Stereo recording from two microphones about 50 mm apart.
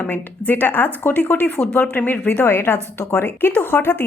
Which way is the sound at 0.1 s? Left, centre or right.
Left.